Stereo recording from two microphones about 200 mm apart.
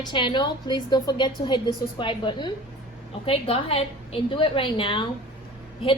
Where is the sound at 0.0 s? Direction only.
25° left (ahead or behind).